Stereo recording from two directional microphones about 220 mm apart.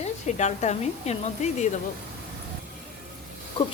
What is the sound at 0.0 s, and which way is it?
Speech, 30° left (ahead or behind).